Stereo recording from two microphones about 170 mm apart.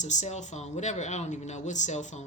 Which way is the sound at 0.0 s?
45° left (ahead or behind).